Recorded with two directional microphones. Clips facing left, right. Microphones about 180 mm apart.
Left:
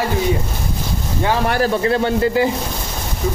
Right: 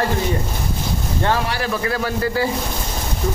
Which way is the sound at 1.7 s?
25° left (ahead or behind).